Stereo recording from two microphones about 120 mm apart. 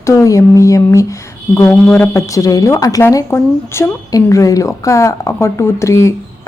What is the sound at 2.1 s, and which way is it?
Speech, 25° left (ahead or behind).